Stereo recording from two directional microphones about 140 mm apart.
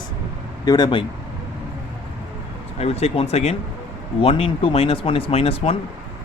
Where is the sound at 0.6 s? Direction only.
30° left (ahead or behind).